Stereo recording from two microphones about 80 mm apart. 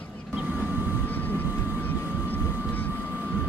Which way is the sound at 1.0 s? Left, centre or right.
Left.